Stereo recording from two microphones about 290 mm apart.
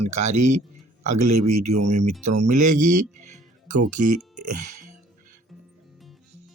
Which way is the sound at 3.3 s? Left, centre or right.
Right.